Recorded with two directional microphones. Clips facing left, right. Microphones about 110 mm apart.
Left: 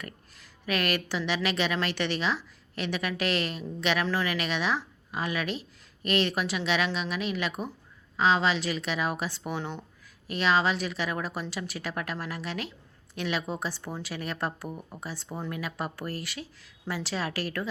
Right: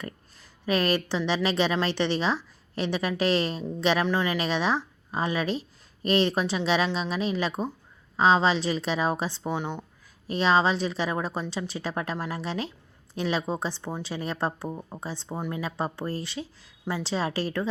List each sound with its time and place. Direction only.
0.6 s a woman's voice: 30° right (ahead or behind)
10.2 s speech: 30° right (ahead or behind)